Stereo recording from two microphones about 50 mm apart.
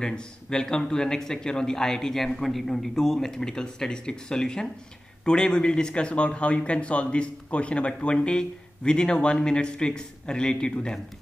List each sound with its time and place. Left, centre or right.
0.0 s a man's voice: centre